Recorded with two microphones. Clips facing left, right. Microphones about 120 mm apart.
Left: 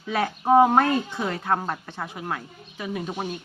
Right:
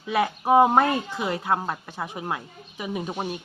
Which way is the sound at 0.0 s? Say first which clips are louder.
Right 1 dB; 10° right (ahead or behind).